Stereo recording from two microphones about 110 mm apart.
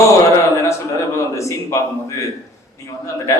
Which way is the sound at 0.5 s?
25° left (ahead or behind).